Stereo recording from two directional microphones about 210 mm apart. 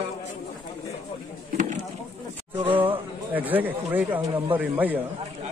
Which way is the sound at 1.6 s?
35° right (ahead or behind).